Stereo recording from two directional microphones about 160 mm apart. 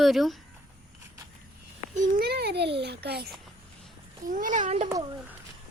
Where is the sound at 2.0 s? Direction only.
70° right (ahead or behind); by 3.2 s 90° right.